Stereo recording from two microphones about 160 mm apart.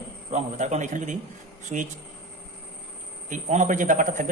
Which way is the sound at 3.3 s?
50° right (ahead or behind).